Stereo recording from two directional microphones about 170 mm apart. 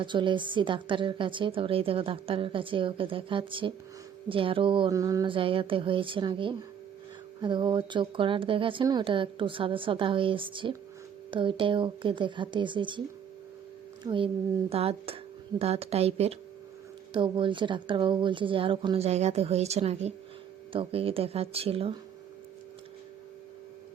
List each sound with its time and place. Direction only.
0.0 s a woman's voice: 30° right (ahead or behind)
14.0 s a woman's voice: 30° right (ahead or behind)